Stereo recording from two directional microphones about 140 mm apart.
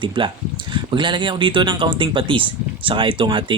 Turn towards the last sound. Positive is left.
turn(degrees=-35)  # may be behind; listen again after turning